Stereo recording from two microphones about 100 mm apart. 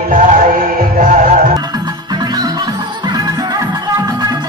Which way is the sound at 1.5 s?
40° right (ahead or behind).